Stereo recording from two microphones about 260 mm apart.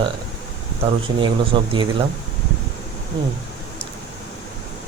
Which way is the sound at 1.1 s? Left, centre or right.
Centre.